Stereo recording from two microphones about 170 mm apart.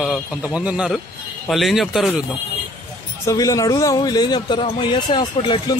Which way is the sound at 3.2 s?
20° left (ahead or behind).